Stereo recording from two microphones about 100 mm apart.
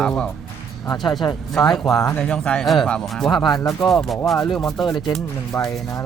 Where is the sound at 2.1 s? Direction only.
20° left (ahead or behind).